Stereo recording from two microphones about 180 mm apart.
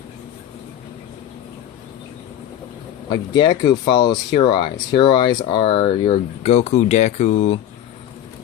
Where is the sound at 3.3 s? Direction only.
25° left (ahead or behind).